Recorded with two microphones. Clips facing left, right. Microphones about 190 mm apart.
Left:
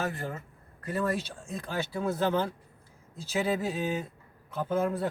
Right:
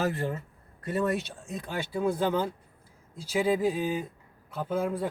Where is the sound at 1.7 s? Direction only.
15° right (ahead or behind).